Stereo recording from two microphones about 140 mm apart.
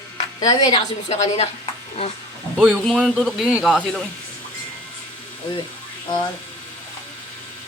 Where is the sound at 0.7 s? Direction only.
55° left (ahead or behind).